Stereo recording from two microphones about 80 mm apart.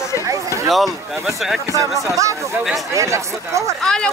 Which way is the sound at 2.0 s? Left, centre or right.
Right.